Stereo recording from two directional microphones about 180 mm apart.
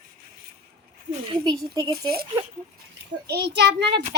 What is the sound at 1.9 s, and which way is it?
A child's voice, 60° right (ahead or behind).